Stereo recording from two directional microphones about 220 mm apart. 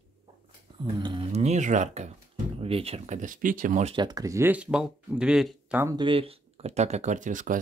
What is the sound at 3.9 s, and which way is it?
Speech, 20° right (ahead or behind).